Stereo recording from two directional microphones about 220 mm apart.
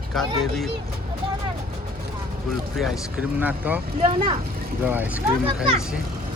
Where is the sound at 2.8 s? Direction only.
Centre (ahead or behind).